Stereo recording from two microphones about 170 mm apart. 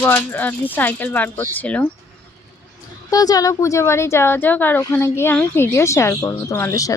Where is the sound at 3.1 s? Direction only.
20° left (ahead or behind).